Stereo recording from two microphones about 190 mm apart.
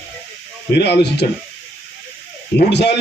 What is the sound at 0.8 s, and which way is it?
Speech, 60° left (ahead or behind).